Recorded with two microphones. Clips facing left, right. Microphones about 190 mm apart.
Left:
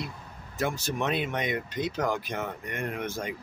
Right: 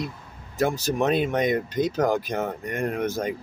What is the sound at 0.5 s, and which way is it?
Speech, 40° right (ahead or behind).